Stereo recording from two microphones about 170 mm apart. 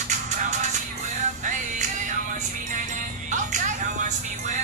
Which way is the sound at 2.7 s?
50° right (ahead or behind).